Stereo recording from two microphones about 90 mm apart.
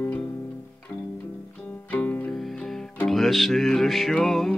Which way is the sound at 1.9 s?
15° left (ahead or behind).